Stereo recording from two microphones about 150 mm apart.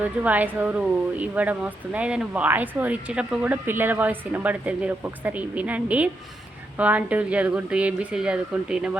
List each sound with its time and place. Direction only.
0.0 s speech: 10° right (ahead or behind)